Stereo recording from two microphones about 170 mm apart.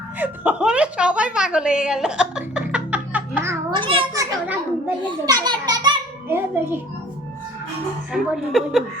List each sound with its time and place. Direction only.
0.2 s a woman's voice: 10° right (ahead or behind)
3.7 s a child's voice: 30° right (ahead or behind)
4.1 s a child's voice: 20° right (ahead or behind)
6.2 s a child's voice: 15° right (ahead or behind)
8.1 s a woman's voice: centre (ahead or behind)